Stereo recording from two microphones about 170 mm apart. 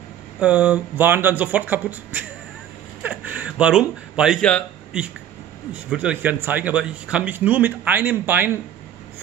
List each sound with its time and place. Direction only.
0.4 s a man's voice: 10° right (ahead or behind)
3.0 s a sound: 10° right (ahead or behind)
5.7 s a man's voice: 5° right (ahead or behind)